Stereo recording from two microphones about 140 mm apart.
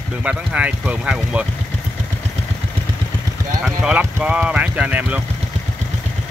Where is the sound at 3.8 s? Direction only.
10° right (ahead or behind).